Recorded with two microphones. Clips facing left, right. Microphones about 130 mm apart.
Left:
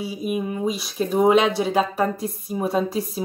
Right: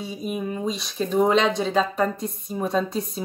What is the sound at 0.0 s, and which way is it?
Speech, 5° left (ahead or behind).